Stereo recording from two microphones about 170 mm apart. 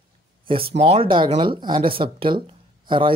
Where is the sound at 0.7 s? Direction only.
35° right (ahead or behind).